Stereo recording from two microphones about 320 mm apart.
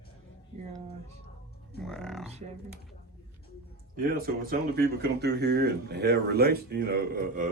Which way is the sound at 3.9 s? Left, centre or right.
Right.